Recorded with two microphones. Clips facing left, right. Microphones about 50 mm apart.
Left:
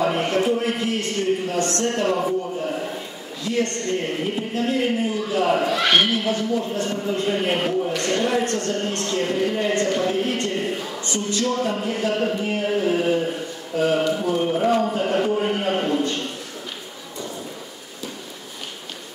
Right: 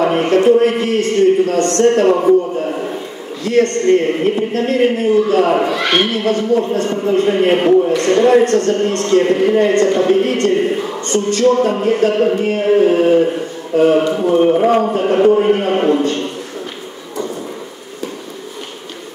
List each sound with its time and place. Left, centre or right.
0.0 s a man's voice: right
3.4 s a man's voice: right
12.1 s speech: right
12.4 s a man's voice: right
12.6 s speech: right